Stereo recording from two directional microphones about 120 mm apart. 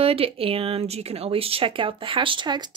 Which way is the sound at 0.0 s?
50° right (ahead or behind).